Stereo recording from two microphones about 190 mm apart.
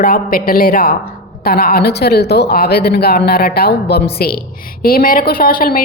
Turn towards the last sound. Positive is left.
turn(degrees=50)  # may be behind; listen again after turning